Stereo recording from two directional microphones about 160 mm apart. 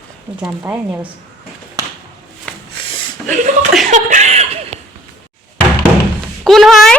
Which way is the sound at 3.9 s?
50° right (ahead or behind).